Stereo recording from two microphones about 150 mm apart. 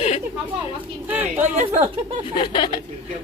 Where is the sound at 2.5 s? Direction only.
30° left (ahead or behind).